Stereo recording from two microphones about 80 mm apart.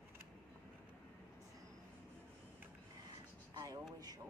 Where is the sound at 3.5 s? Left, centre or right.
Right.